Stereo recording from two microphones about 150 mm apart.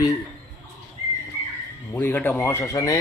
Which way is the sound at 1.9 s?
15° left (ahead or behind).